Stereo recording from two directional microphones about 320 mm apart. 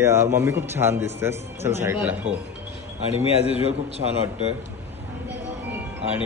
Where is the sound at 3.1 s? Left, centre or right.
Centre.